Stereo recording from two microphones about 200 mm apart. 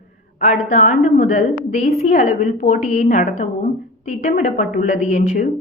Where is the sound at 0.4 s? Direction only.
40° left (ahead or behind).